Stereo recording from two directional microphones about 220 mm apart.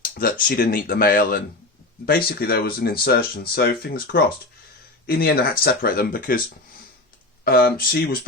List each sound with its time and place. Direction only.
0.0 s speech: 40° left (ahead or behind)
7.4 s speech: 45° left (ahead or behind)